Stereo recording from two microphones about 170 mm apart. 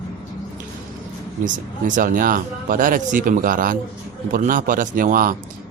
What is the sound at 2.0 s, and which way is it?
Speech, 55° right (ahead or behind).